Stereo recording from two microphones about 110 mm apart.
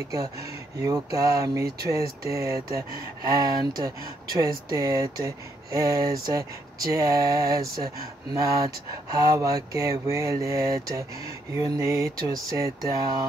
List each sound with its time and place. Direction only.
0.7 s speech: 30° right (ahead or behind)